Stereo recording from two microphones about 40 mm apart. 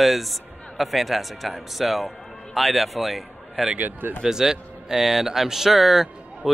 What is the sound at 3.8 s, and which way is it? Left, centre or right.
Speech, right.